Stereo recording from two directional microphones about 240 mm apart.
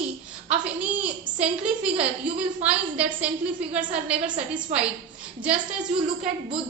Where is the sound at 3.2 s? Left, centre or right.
Centre.